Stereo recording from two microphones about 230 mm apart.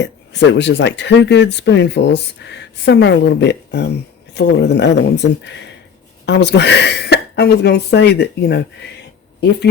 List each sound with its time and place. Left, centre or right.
0.0 s speech: left